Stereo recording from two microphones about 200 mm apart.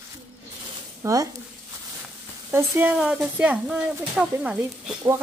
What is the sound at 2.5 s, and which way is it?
Speech, 10° right (ahead or behind).